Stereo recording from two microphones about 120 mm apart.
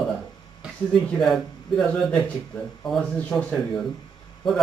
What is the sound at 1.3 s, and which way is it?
A man's voice, centre (ahead or behind).